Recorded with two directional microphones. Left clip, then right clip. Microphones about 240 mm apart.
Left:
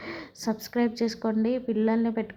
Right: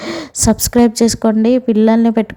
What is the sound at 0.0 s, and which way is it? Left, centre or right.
A woman's voice, right.